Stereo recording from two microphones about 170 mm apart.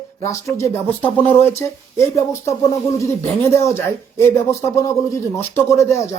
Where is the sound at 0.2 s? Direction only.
20° left (ahead or behind).